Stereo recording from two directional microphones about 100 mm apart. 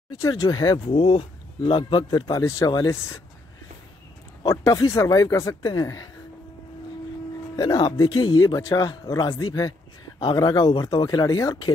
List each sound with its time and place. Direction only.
0.2 s a man's voice: 35° left (ahead or behind)
0.8 s speech: 80° left
1.7 s a man's voice: 60° left (ahead or behind)
2.3 s a man's voice: 35° left (ahead or behind)
4.5 s a man's voice: 35° left (ahead or behind)
7.5 s a man's voice: 45° left (ahead or behind)